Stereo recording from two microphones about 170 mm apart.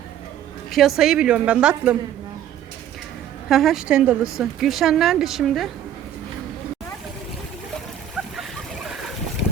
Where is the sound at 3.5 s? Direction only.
Centre (ahead or behind).